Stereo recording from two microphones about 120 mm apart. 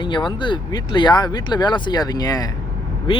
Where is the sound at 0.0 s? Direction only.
40° left (ahead or behind).